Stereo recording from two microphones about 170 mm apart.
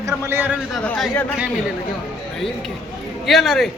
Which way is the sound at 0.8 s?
10° left (ahead or behind).